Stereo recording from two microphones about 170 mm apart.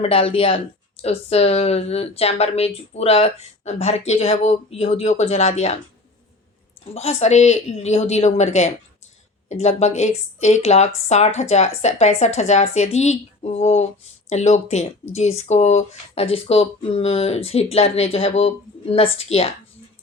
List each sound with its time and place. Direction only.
0.0 s speech: 35° left (ahead or behind)
6.9 s speech: 40° left (ahead or behind)